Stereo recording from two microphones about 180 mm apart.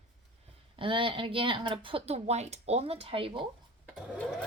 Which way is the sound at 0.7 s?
30° right (ahead or behind).